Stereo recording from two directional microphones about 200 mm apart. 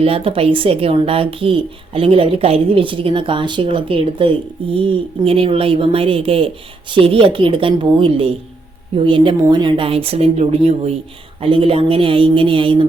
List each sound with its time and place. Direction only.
0.0 s speech: 30° right (ahead or behind)